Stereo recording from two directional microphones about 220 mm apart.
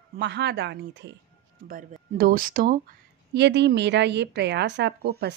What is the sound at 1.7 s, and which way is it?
Speech, 40° right (ahead or behind).